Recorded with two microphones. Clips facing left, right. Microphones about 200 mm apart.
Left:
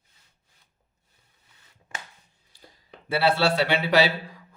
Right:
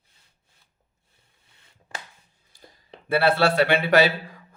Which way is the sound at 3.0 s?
55° right (ahead or behind).